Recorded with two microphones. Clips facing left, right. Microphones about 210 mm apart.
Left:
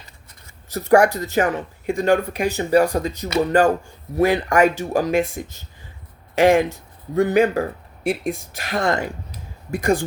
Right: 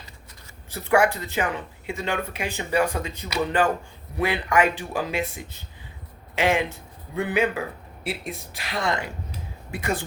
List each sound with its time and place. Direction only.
0.7 s speech: 40° left (ahead or behind)